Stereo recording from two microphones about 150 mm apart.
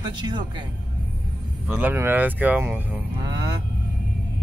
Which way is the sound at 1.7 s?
10° right (ahead or behind).